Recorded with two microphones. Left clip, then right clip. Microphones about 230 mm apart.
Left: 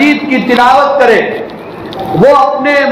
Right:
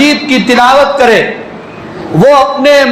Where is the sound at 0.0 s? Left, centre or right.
Right.